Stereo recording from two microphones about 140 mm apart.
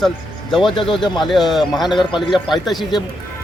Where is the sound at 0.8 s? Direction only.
35° left (ahead or behind).